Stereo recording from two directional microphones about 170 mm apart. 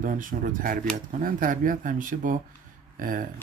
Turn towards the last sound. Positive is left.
turn(degrees=-55)  # may be behind; listen again after turning